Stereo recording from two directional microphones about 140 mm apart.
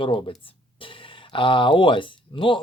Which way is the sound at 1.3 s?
35° left (ahead or behind).